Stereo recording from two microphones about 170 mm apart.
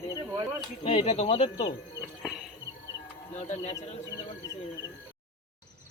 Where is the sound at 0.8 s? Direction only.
35° left (ahead or behind).